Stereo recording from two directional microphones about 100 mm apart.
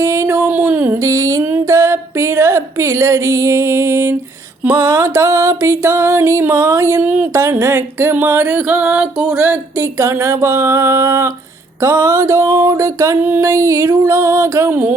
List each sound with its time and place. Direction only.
0.0 s music: 30° right (ahead or behind)